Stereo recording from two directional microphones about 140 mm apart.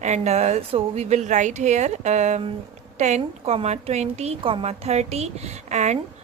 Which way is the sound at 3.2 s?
45° right (ahead or behind).